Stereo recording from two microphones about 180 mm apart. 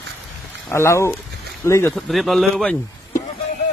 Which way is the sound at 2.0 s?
Centre (ahead or behind).